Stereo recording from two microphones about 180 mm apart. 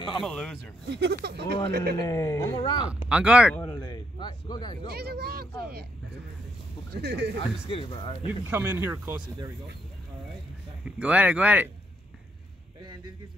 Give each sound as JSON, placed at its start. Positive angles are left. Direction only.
{"t": 0.2, "sound": "speech", "side_deg": 0}
{"t": 0.8, "sound": "a man's voice", "side_deg": -70}
{"t": 2.0, "sound": "a man's voice", "side_deg": 20}
{"t": 2.5, "sound": "speech", "side_deg": 30}
{"t": 3.1, "sound": "speech", "side_deg": -5}
{"t": 3.7, "sound": "a sound", "side_deg": 20}
{"t": 4.8, "sound": "a sound", "side_deg": -65}
{"t": 7.0, "sound": "speech", "side_deg": -70}
{"t": 7.6, "sound": "speech", "side_deg": 30}
{"t": 8.3, "sound": "speech", "side_deg": -10}
{"t": 10.9, "sound": "speech", "side_deg": -10}